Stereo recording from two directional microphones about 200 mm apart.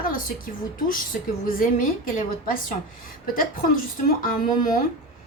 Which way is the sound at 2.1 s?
45° left (ahead or behind).